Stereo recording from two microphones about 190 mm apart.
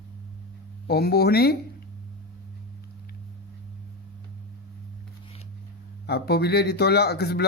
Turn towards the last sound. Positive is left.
turn(degrees=55)  # may be behind; listen again after turning